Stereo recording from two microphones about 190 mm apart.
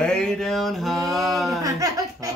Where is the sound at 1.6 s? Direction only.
20° right (ahead or behind).